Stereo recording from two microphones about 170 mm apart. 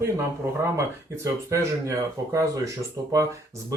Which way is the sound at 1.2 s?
15° right (ahead or behind).